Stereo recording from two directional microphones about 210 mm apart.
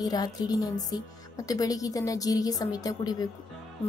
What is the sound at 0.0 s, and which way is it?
A woman's voice, 20° left (ahead or behind).